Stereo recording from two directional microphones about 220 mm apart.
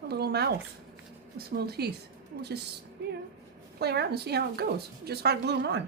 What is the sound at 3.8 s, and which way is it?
Speech, 50° right (ahead or behind).